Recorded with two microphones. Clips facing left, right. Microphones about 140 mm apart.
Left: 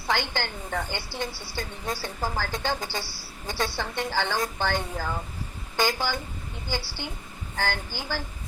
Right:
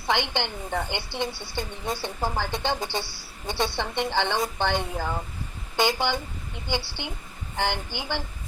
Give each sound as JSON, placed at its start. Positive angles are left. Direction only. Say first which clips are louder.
{"t": 0.1, "sound": "a woman's voice", "louder": "right 2 dB", "side_deg": -20}